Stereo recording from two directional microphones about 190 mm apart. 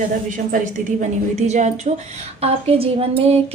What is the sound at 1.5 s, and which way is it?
A woman's voice, 40° right (ahead or behind).